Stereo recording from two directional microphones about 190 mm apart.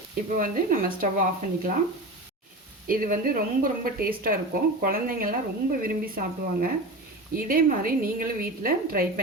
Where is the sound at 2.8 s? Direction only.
50° right (ahead or behind).